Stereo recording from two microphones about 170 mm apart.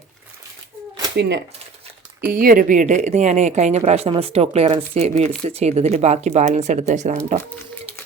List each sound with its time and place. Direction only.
1.1 s speech: 90° right
2.3 s speech: 55° right (ahead or behind)